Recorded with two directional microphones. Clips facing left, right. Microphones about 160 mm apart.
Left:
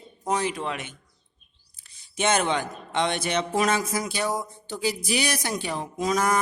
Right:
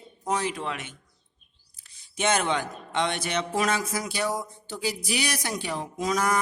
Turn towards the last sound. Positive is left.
turn(degrees=25)  # may be behind; listen again after turning